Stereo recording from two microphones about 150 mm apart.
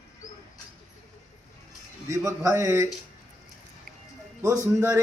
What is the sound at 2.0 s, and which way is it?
Speech, 20° right (ahead or behind).